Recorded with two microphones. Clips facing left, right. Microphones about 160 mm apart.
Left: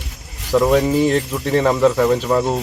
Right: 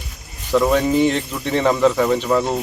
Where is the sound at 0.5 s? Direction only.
Centre (ahead or behind).